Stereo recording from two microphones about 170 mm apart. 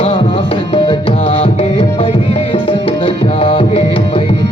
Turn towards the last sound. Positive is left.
turn(degrees=35)  # may be behind; listen again after turning